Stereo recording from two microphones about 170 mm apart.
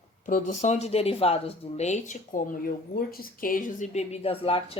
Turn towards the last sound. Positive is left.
turn(degrees=35)  # may be behind; listen again after turning